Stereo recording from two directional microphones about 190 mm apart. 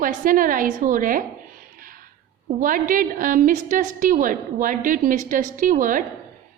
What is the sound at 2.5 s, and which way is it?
A woman's voice, 45° right (ahead or behind).